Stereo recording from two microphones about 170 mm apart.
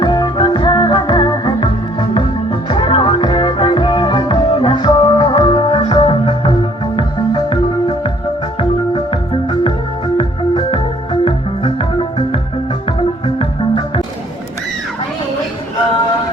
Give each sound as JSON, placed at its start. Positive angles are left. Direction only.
{"t": 0.0, "sound": "music", "side_deg": 30}
{"t": 9.0, "sound": "organ", "side_deg": 30}
{"t": 10.2, "sound": "music", "side_deg": 30}